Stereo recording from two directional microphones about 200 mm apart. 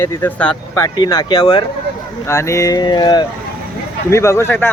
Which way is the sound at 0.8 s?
20° left (ahead or behind).